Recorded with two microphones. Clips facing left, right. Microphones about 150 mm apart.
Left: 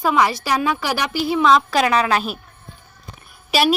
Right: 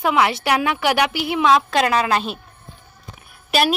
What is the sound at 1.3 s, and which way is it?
Speech, 5° right (ahead or behind).